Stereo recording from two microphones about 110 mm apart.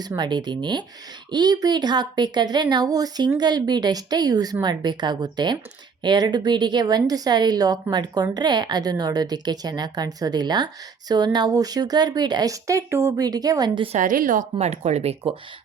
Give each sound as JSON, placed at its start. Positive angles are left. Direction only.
{"t": 0.2, "sound": "a woman's voice", "side_deg": -40}
{"t": 13.9, "sound": "speech", "side_deg": -90}